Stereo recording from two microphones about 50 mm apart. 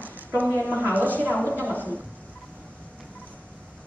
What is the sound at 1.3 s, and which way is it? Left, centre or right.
Speech, left.